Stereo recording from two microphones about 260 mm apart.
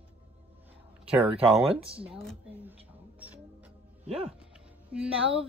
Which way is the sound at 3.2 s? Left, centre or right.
Centre.